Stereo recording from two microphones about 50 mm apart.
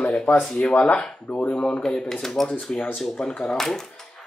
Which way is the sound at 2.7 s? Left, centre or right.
Centre.